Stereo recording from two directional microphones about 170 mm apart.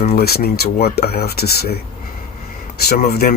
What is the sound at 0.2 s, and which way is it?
Speech, 65° left (ahead or behind).